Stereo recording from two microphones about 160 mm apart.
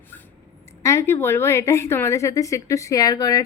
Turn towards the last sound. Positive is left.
turn(degrees=20)  # may be behind; listen again after turning